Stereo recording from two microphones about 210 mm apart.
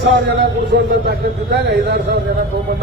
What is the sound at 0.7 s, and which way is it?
A man's voice, 55° right (ahead or behind).